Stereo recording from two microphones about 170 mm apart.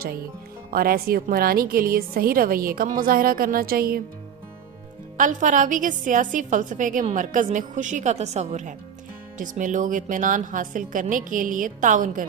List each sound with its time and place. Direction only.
0.7 s a woman's voice: 60° right (ahead or behind)
5.1 s a woman's voice: 50° right (ahead or behind)